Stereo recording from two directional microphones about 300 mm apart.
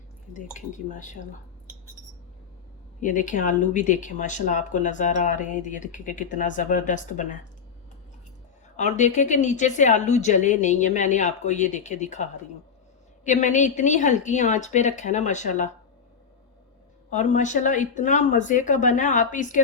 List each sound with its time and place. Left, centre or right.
0.3 s speech: left
3.0 s speech: left
8.7 s speech: left
17.1 s speech: left